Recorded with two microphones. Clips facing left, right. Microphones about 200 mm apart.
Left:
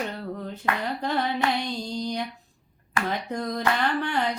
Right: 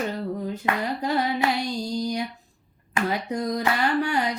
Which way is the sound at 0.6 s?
20° right (ahead or behind).